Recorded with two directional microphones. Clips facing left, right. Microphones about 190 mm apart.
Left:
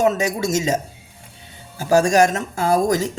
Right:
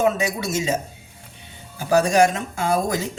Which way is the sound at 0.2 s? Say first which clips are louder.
Left 3 dB; 40° left (ahead or behind).